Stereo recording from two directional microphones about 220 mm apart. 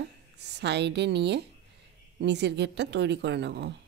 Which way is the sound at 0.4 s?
50° right (ahead or behind).